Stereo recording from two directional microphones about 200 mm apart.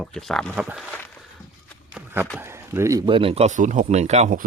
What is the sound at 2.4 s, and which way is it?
Speech, 10° right (ahead or behind).